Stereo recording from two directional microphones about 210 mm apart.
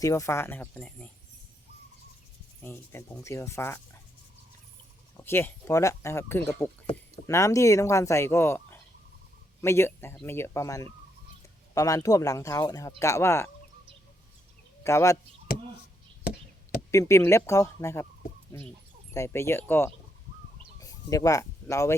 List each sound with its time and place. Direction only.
0.0 s speech: 15° left (ahead or behind)
2.6 s speech: 10° left (ahead or behind)
5.1 s speech: 10° left (ahead or behind)
14.8 s speech: 15° left (ahead or behind)
16.9 s speech: 15° left (ahead or behind)